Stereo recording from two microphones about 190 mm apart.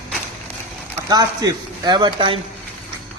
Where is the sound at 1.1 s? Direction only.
20° right (ahead or behind).